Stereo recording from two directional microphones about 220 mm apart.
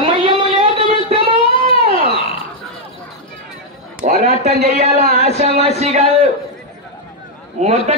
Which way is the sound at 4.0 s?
35° right (ahead or behind).